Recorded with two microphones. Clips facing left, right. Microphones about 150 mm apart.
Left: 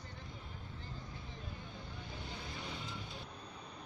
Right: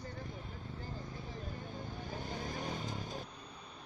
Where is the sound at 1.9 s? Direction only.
45° right (ahead or behind).